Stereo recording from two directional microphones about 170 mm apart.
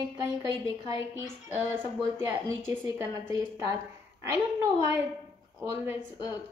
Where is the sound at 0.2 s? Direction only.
20° right (ahead or behind).